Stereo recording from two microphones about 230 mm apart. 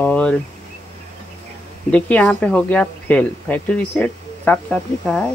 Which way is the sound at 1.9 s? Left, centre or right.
Centre.